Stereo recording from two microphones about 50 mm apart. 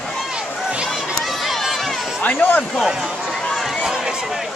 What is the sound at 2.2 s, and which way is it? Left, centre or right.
Speech, left.